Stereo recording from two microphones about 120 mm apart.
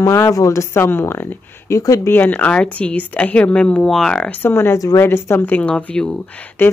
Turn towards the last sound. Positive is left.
turn(degrees=15)  # may be behind; listen again after turning